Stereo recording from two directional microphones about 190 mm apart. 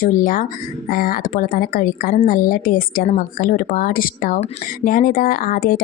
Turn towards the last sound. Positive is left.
turn(degrees=50)  # may be behind; listen again after turning